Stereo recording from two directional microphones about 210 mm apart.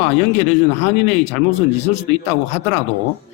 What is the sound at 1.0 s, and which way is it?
A man's voice, 30° left (ahead or behind).